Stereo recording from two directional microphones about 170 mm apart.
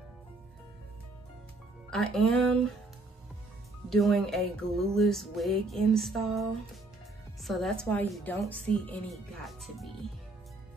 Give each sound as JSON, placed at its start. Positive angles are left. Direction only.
{"t": 1.9, "sound": "music", "side_deg": 0}
{"t": 3.9, "sound": "music", "side_deg": 0}
{"t": 7.4, "sound": "a woman's voice", "side_deg": 0}
{"t": 8.1, "sound": "music", "side_deg": 5}